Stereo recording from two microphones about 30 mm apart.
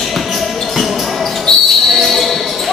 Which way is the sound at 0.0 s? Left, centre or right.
Centre.